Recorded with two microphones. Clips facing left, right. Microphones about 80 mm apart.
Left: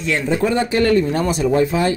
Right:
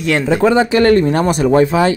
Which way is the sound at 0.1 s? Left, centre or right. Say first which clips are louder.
Right 6 dB; right.